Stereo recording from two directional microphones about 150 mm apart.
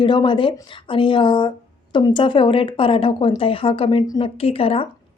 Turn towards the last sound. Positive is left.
turn(degrees=40)  # may be behind; listen again after turning